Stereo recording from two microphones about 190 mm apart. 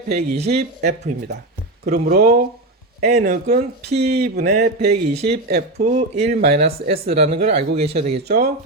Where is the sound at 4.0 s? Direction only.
55° right (ahead or behind).